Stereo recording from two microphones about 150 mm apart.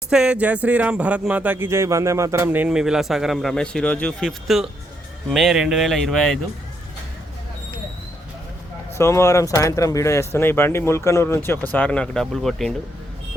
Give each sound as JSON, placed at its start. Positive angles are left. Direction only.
{"t": 0.1, "sound": "speech", "side_deg": -5}
{"t": 9.0, "sound": "speech", "side_deg": 20}